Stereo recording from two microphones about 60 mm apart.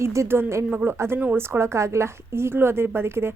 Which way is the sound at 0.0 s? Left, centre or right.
Right.